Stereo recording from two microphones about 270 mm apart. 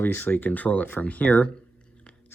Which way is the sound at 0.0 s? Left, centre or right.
Centre.